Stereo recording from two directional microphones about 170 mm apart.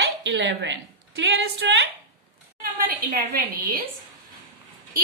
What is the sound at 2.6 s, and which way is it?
A woman's voice, 60° right (ahead or behind).